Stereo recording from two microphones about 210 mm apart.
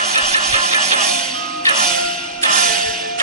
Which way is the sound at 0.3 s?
30° right (ahead or behind).